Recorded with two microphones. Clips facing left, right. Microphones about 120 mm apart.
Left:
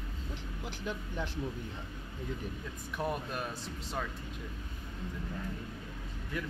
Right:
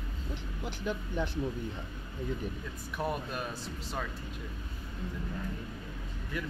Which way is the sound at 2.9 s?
10° right (ahead or behind).